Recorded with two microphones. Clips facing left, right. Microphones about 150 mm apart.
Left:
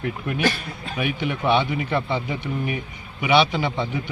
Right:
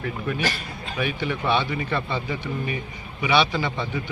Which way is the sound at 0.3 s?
60° left (ahead or behind).